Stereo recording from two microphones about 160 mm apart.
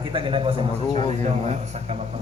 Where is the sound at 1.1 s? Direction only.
45° right (ahead or behind).